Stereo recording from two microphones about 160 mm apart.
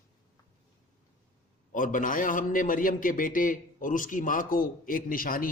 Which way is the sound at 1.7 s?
55° left (ahead or behind).